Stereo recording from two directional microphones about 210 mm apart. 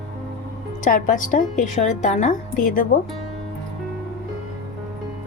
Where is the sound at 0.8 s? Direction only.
35° left (ahead or behind).